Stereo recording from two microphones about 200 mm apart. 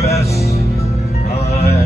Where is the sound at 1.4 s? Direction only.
30° left (ahead or behind).